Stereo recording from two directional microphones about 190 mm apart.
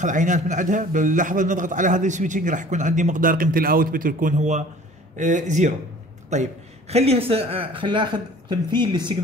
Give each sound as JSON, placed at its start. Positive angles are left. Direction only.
{"t": 0.0, "sound": "a man's voice", "side_deg": -40}